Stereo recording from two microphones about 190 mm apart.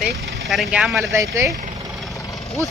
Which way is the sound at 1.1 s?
15° right (ahead or behind).